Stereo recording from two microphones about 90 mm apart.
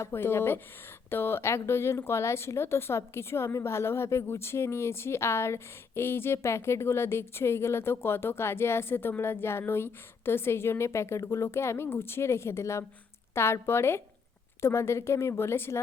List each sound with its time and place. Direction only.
0.0 s a woman's voice: 25° left (ahead or behind)